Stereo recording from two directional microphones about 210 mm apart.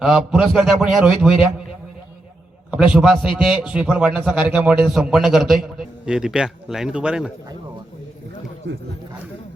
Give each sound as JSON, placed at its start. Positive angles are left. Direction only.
{"t": 0.0, "sound": "a man's voice", "side_deg": -5}
{"t": 2.6, "sound": "a man's voice", "side_deg": -5}
{"t": 8.7, "sound": "speech", "side_deg": -65}